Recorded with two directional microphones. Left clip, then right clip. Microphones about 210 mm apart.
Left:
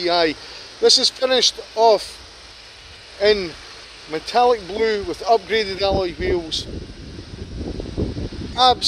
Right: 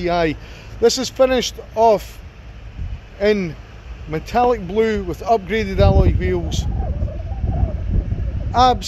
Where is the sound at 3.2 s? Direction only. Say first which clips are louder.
Left 1 dB; centre (ahead or behind).